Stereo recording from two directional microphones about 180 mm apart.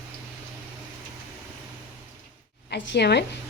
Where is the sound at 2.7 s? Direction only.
65° left (ahead or behind).